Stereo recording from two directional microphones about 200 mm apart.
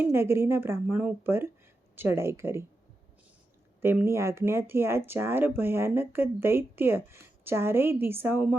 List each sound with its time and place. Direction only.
0.0 s speech: 10° right (ahead or behind)
3.8 s speech: 10° right (ahead or behind)